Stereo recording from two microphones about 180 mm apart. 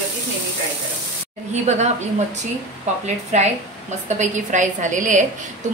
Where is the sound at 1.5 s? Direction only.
40° right (ahead or behind).